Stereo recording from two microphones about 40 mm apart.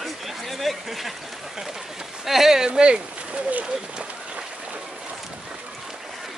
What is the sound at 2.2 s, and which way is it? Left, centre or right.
Speech, centre.